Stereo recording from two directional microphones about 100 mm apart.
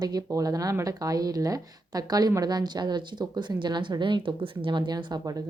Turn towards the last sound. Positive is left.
turn(degrees=-40)  # may be behind; listen again after turning